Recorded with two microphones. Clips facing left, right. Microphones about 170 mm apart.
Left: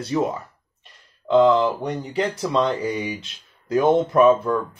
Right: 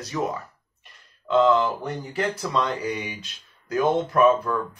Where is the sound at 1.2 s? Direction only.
15° left (ahead or behind).